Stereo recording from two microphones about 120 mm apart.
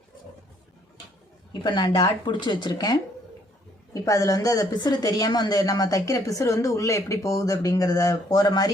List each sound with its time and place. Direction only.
1.6 s a woman's voice: 40° left (ahead or behind)